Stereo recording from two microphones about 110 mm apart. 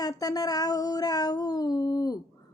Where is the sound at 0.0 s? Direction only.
35° left (ahead or behind).